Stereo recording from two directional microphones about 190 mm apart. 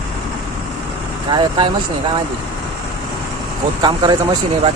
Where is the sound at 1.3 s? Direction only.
25° right (ahead or behind).